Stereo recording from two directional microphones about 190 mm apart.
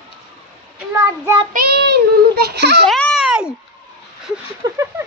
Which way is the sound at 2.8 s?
Centre (ahead or behind).